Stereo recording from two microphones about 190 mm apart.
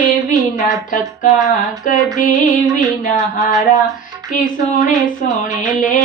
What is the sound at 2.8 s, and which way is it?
Music, 20° right (ahead or behind).